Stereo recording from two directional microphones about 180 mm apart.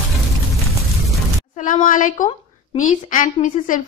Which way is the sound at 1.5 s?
45° left (ahead or behind).